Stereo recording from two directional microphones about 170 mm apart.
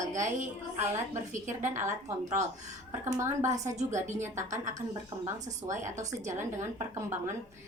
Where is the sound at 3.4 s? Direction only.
45° right (ahead or behind).